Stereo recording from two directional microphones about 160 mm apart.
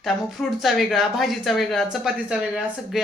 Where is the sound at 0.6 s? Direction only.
Centre (ahead or behind).